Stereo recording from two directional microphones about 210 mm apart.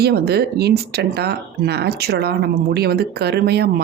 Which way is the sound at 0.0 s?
50° right (ahead or behind).